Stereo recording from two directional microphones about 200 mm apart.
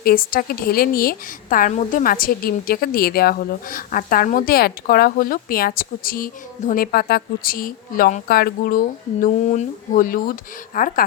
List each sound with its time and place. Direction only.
0.0 s a woman's voice: 45° left (ahead or behind)